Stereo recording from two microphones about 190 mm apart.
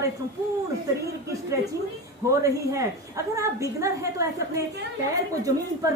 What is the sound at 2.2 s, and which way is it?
A woman's voice, 15° right (ahead or behind).